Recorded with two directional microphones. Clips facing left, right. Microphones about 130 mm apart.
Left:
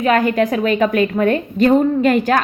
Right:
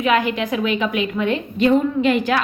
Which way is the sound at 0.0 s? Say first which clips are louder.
Left 4 dB; 45° left (ahead or behind).